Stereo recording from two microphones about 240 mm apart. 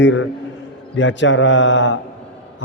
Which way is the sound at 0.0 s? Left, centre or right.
Left.